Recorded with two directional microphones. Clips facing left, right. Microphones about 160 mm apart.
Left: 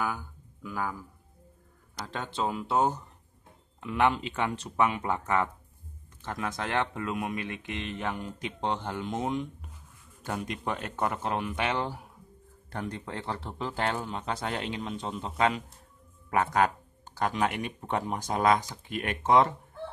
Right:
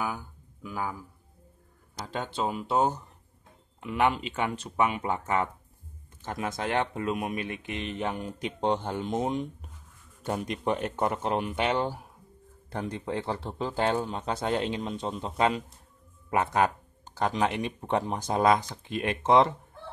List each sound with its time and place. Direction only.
0.0 s a sound: 10° right (ahead or behind)
2.0 s speech: 10° right (ahead or behind)
3.8 s speech: 5° right (ahead or behind); by 19.5 s 25° right (ahead or behind)